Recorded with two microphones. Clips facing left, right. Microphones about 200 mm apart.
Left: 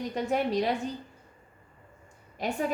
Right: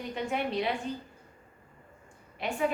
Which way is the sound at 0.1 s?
40° left (ahead or behind).